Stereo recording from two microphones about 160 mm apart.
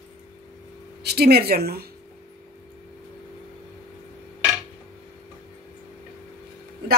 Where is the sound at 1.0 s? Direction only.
90° right.